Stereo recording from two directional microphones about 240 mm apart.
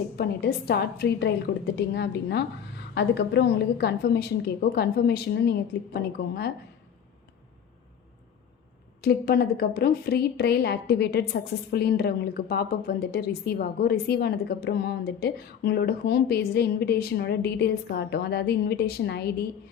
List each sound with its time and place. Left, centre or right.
0.2 s a woman's voice: left
9.0 s a woman's voice: left